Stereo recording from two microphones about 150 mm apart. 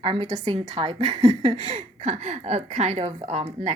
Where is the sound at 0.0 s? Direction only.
35° right (ahead or behind).